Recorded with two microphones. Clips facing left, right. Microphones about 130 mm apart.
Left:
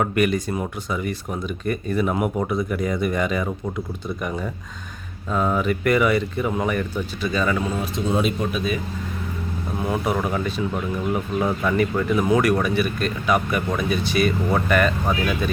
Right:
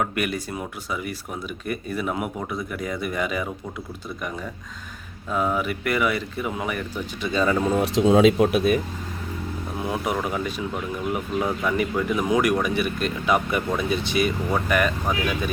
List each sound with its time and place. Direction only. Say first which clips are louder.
0.0 s speech: left 5 dB; 5° right (ahead or behind)
5.3 s speech: left 3 dB; 5° right (ahead or behind)
7.2 s speech: right 1 dB; 25° right (ahead or behind)
7.8 s speech: right 6 dB; 90° right; by 8.8 s 65° right (ahead or behind)
9.9 s speech: left 3 dB; 10° right (ahead or behind)
11.6 s speech: left 2 dB; 5° right (ahead or behind)